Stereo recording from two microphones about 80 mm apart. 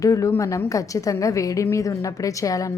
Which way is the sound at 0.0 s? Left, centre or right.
Left.